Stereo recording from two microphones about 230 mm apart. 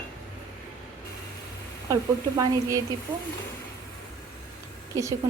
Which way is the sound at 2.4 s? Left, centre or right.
Centre.